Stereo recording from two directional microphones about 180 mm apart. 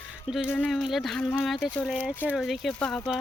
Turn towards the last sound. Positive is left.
turn(degrees=0)  # may be behind; listen again after turning